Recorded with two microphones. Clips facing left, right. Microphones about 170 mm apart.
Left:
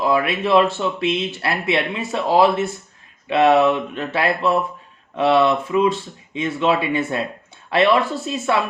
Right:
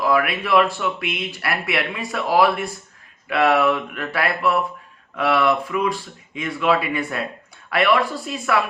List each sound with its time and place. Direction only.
0.0 s speech: 25° left (ahead or behind)